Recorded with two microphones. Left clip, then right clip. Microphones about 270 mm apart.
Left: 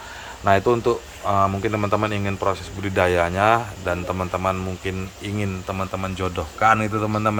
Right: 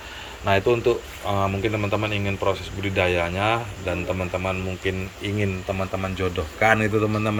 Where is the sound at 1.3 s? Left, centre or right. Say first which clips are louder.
Left 4 dB; centre.